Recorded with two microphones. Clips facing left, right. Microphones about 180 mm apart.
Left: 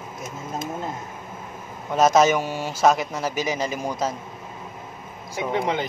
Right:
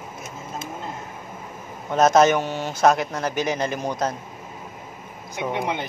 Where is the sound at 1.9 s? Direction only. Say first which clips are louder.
Right 1 dB; 5° left (ahead or behind).